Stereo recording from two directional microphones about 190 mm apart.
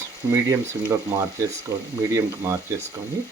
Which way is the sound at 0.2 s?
10° right (ahead or behind).